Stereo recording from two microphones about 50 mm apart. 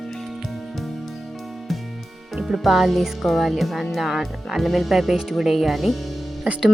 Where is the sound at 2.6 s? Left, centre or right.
Centre.